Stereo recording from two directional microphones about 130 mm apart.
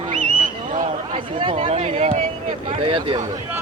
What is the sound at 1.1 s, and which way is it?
Speech, 45° right (ahead or behind).